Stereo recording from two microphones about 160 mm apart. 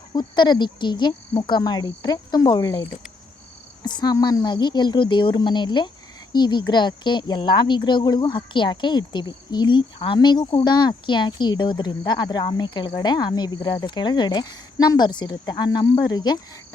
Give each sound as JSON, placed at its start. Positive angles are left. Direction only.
{"t": 0.1, "sound": "speech", "side_deg": 25}
{"t": 3.8, "sound": "speech", "side_deg": 25}